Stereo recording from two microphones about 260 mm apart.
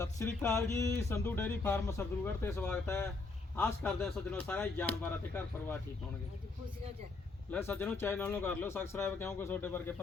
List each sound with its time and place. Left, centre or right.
0.0 s speech: centre
7.5 s speech: centre